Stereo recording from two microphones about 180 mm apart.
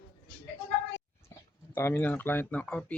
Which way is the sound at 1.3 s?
15° left (ahead or behind).